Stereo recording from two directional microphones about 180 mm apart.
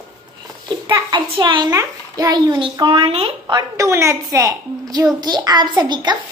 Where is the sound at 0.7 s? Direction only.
25° right (ahead or behind).